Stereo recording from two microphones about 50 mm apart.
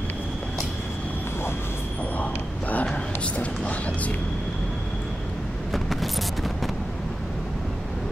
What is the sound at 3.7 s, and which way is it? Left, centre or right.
Music, left.